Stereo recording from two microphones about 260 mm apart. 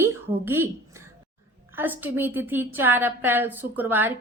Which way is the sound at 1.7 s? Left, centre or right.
Centre.